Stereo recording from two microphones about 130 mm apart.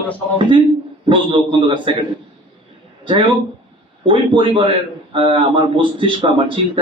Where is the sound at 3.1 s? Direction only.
40° right (ahead or behind).